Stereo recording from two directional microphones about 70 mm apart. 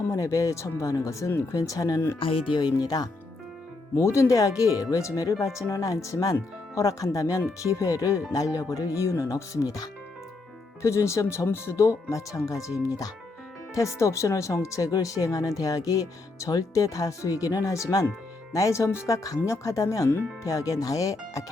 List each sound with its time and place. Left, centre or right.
0.1 s speech: left
2.6 s speech: left
3.9 s speech: left
9.3 s speech: left
10.8 s speech: left
12.5 s speech: left
13.7 s speech: left